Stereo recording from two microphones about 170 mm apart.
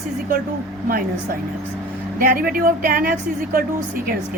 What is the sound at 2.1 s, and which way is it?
Speech, 55° right (ahead or behind).